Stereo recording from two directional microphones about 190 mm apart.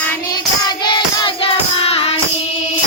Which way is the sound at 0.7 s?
25° left (ahead or behind).